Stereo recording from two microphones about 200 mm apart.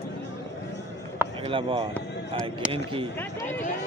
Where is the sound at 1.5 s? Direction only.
25° right (ahead or behind).